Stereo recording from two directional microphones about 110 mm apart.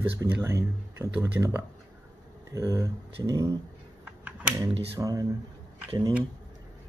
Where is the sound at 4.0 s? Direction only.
15° right (ahead or behind).